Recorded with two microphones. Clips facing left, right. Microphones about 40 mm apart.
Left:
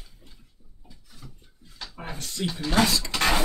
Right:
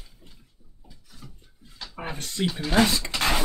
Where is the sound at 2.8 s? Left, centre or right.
Right.